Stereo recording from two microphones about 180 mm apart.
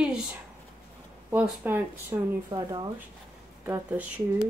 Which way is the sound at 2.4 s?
20° right (ahead or behind).